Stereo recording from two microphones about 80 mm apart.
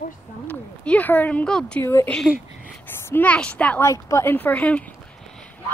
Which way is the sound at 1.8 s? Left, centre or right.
Left.